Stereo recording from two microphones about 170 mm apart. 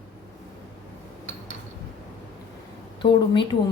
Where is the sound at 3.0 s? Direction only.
30° left (ahead or behind).